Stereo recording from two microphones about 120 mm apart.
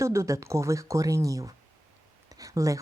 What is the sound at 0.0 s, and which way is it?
Speech, 25° right (ahead or behind).